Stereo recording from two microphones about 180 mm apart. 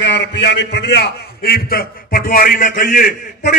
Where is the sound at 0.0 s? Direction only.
80° left.